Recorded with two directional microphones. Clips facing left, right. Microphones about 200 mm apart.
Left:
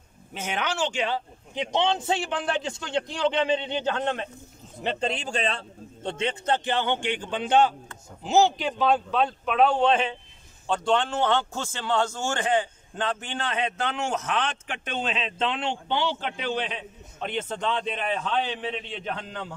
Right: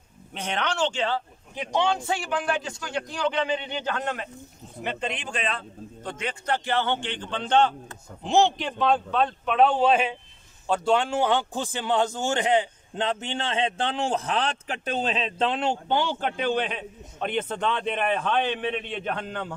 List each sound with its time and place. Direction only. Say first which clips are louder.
0.3 s a man's voice: right 1 dB; 5° left (ahead or behind); by 19.5 s 55° right (ahead or behind)